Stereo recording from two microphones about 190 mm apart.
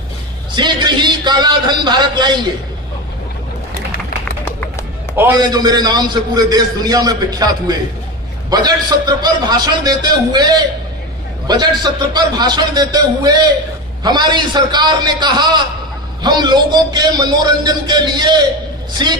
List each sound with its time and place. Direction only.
0.6 s a man's voice: 25° right (ahead or behind)
5.1 s a man's voice: 15° right (ahead or behind)